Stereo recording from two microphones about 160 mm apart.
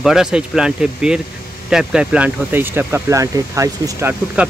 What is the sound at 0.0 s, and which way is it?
Speech, 5° right (ahead or behind).